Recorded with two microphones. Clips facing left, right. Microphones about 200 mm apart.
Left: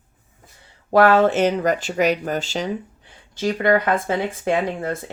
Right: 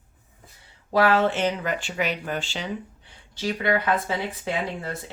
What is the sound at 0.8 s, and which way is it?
Speech, 50° left (ahead or behind).